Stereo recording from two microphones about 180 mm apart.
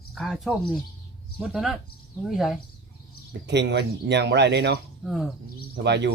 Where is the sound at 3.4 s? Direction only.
75° right (ahead or behind).